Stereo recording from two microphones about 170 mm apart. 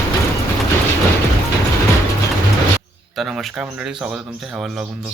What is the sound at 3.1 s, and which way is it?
Speech, centre (ahead or behind).